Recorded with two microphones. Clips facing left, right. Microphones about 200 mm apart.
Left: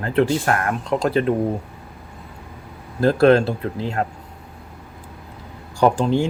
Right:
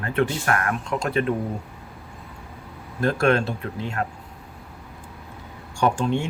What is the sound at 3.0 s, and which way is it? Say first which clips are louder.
Speech: left 6 dB; 35° left (ahead or behind).